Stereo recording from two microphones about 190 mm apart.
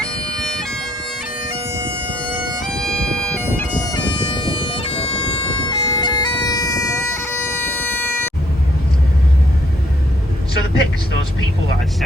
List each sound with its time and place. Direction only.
0.0 s bagpipes: 5° left (ahead or behind)
2.6 s bagpipes: centre (ahead or behind)
3.8 s bagpipes: 20° left (ahead or behind)